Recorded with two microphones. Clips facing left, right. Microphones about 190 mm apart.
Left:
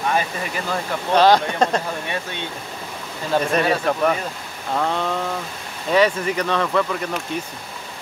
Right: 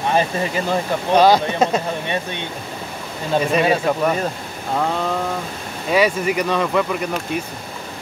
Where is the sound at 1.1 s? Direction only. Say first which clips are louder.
Right 1 dB; 10° right (ahead or behind).